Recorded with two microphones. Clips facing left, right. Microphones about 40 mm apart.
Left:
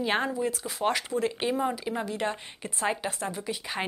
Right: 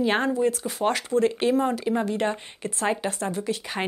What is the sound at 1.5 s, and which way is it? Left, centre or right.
Speech, centre.